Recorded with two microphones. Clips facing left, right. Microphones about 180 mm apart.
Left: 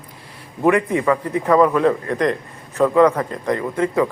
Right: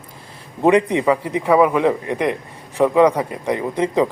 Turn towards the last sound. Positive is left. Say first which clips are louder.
# right 1 dB
turn(degrees=-20)  # may be behind; listen again after turning